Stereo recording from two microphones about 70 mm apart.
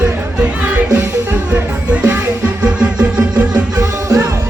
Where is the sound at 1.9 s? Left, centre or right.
Right.